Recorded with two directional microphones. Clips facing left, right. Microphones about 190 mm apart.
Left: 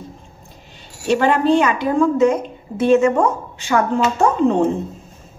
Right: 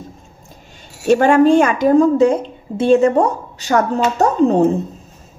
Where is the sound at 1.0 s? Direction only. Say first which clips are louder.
Right 5 dB; 45° right (ahead or behind).